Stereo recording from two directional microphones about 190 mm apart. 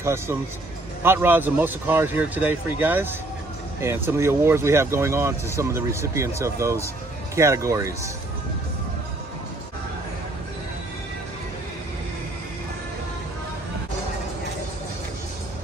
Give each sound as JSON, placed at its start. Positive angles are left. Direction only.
{"t": 0.0, "sound": "speech", "side_deg": -15}